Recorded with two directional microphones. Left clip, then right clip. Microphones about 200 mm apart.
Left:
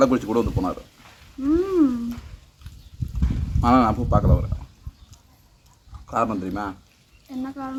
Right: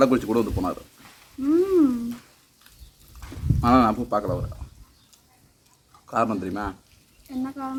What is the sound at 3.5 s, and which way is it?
Speech, 5° right (ahead or behind).